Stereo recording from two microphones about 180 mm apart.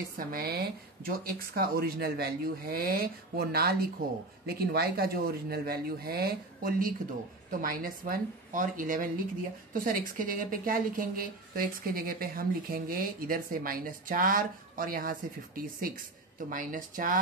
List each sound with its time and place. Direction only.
0.2 s a woman's voice: 55° right (ahead or behind)